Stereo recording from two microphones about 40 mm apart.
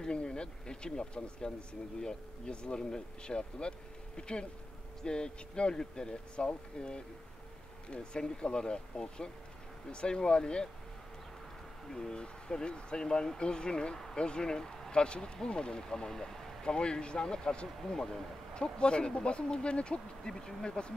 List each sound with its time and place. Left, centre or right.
0.0 s speech: left
11.9 s speech: centre
14.9 s speech: left
16.7 s speech: left